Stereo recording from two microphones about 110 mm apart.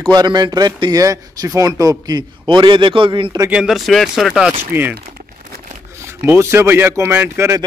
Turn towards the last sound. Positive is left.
turn(degrees=-20)  # may be behind; listen again after turning